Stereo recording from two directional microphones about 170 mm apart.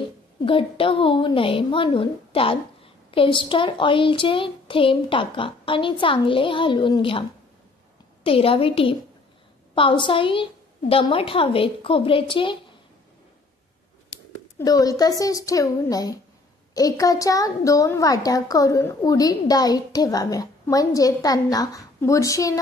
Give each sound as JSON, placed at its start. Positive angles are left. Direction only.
{"t": 0.5, "sound": "a child's voice", "side_deg": 30}
{"t": 14.1, "sound": "a woman's voice", "side_deg": 20}